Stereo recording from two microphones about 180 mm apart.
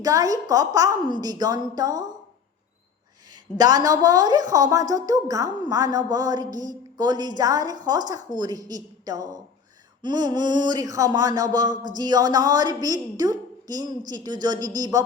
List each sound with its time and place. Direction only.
0.0 s a woman's voice: 20° right (ahead or behind)
3.6 s a woman's voice: 20° right (ahead or behind)